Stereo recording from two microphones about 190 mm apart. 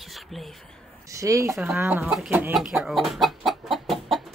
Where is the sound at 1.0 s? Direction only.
15° right (ahead or behind).